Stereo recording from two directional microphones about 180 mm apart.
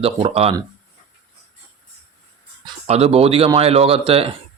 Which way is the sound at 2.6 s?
35° right (ahead or behind).